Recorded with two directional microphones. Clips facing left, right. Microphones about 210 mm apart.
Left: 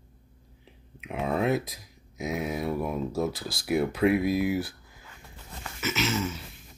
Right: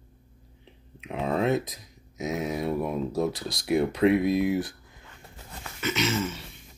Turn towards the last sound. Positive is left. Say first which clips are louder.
# right 1 dB
turn(degrees=0)  # may be behind; listen again after turning